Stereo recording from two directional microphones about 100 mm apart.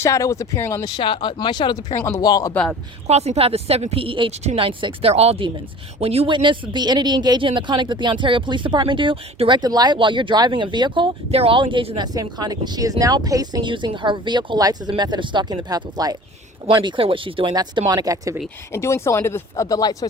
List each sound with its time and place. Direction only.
0.0 s speech: 30° left (ahead or behind)
0.9 s speech: 55° left (ahead or behind)
2.0 s speech: 25° left (ahead or behind)
2.2 s speech: 40° left (ahead or behind)
2.5 s speech: 10° left (ahead or behind)
3.1 s speech: 90° right
6.3 s speech: 55° right (ahead or behind)
11.3 s speech: 75° right (ahead or behind); by 11.9 s 60° right (ahead or behind)
11.9 s speech: 40° right (ahead or behind)
16.7 s speech: 55° right (ahead or behind)
17.5 s speech: 40° right (ahead or behind)
18.7 s speech: 25° left (ahead or behind)